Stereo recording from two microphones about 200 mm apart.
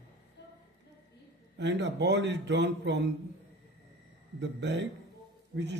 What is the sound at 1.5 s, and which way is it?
A man's voice, 60° right (ahead or behind).